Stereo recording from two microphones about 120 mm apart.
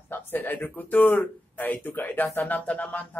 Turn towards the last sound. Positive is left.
turn(degrees=10)  # may be behind; listen again after turning